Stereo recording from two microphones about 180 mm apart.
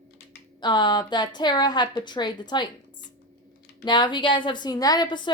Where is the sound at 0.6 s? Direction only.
25° left (ahead or behind).